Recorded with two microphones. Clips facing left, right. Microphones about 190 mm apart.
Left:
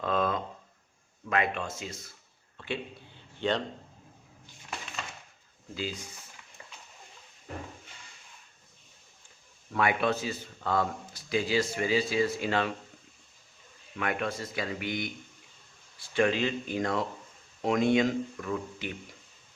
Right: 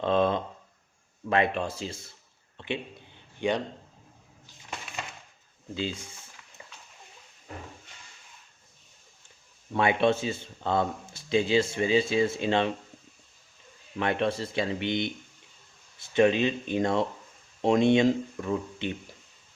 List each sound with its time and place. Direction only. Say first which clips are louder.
0.0 s a sound: right 4 dB; 25° right (ahead or behind)
1.3 s a man's voice: right 4 dB; 30° right (ahead or behind); by 3.6 s 15° right (ahead or behind)
5.7 s a man's voice: right 3 dB; 25° right (ahead or behind)
9.7 s a man's voice: right 4 dB; 25° right (ahead or behind)
13.9 s a man's voice: right 5 dB; 30° right (ahead or behind)